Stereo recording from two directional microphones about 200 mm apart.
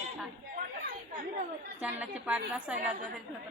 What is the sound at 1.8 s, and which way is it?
Speech, 5° right (ahead or behind).